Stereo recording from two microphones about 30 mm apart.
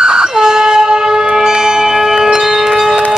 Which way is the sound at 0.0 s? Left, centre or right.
Right.